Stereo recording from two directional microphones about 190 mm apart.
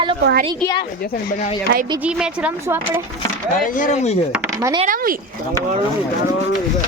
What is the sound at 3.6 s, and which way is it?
Speech, 45° left (ahead or behind).